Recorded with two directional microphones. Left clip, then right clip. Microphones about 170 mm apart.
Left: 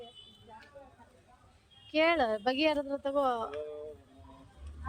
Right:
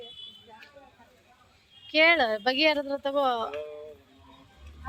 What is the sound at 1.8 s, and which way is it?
Speech, centre (ahead or behind).